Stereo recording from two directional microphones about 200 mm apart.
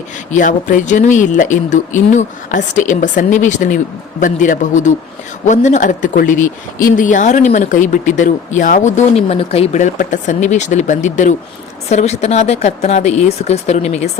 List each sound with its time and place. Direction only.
0.3 s speech: 40° left (ahead or behind)